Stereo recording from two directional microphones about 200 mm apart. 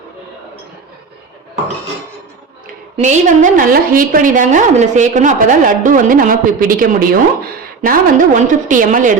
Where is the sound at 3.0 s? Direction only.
40° right (ahead or behind).